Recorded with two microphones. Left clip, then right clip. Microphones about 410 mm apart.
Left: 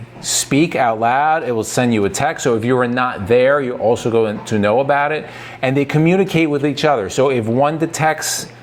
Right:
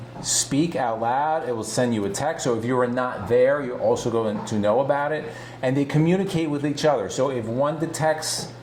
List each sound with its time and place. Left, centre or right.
0.5 s speech: left